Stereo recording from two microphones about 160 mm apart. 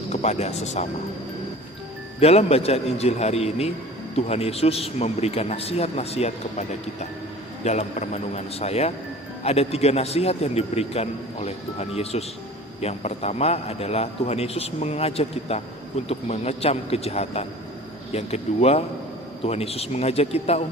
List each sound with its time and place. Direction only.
0.1 s speech: 45° left (ahead or behind)
2.2 s a man's voice: 40° left (ahead or behind)